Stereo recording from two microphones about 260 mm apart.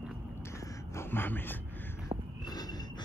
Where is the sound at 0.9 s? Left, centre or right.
Centre.